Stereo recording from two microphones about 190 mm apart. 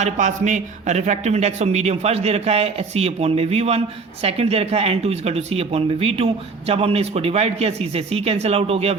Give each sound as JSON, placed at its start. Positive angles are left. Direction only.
{"t": 0.0, "sound": "speech", "side_deg": -40}